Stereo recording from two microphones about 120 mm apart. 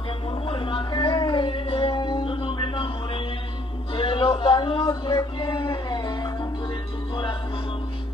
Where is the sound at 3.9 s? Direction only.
45° left (ahead or behind).